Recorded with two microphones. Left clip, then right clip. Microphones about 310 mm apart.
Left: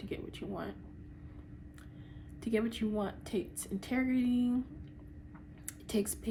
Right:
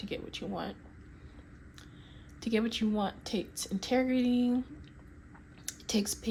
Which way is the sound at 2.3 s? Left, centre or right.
Right.